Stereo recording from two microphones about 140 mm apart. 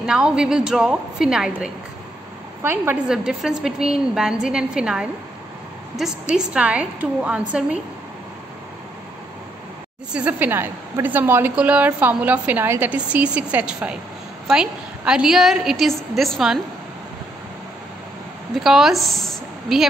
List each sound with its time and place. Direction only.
0.0 s a woman's voice: 5° right (ahead or behind)
2.6 s a woman's voice: 15° right (ahead or behind)
3.1 s a woman's voice: 5° right (ahead or behind)
10.1 s a woman's voice: 10° right (ahead or behind)
18.5 s a woman's voice: centre (ahead or behind)